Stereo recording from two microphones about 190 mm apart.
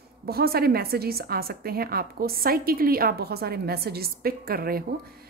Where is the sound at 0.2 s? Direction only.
55° right (ahead or behind).